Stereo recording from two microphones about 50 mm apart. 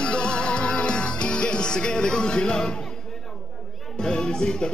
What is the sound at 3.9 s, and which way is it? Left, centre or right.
Speech, centre.